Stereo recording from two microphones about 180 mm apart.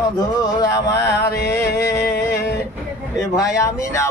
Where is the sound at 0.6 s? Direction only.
20° left (ahead or behind).